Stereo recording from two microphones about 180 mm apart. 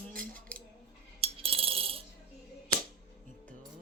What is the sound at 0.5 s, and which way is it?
Scissors, 5° left (ahead or behind).